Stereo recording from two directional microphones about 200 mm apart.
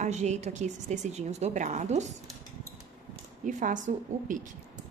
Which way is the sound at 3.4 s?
40° right (ahead or behind).